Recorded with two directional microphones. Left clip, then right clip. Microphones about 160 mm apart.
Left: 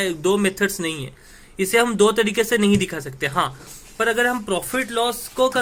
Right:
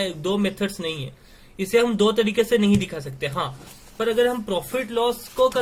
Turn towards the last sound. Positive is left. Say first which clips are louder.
# even
turn(degrees=30)  # may be behind; listen again after turning